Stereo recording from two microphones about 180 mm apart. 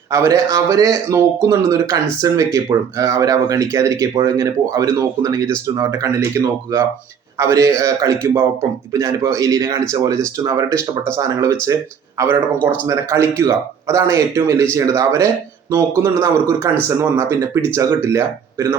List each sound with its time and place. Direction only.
0.1 s speech: 20° right (ahead or behind)